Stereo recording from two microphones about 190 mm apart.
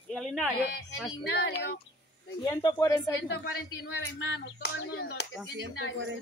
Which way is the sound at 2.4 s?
20° left (ahead or behind).